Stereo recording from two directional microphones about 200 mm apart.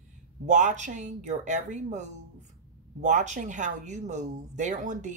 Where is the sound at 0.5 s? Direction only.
35° right (ahead or behind).